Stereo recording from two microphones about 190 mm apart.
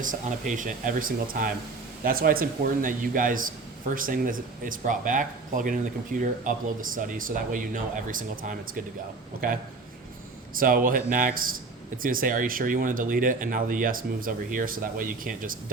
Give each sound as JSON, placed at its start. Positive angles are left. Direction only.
{"t": 0.0, "sound": "speech", "side_deg": -45}
{"t": 10.6, "sound": "speech", "side_deg": -45}